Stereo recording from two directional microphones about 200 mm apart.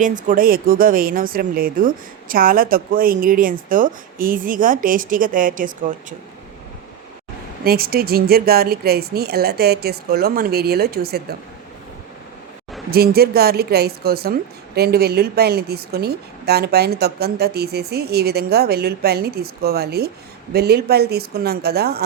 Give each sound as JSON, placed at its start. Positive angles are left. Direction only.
{"t": 0.0, "sound": "speech", "side_deg": -40}
{"t": 7.6, "sound": "speech", "side_deg": -50}
{"t": 12.9, "sound": "speech", "side_deg": -50}